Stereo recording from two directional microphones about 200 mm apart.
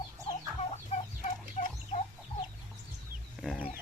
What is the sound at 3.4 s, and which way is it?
Chicken, centre (ahead or behind).